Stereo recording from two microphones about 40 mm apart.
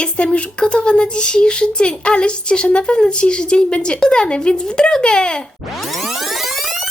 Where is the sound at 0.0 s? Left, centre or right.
Left.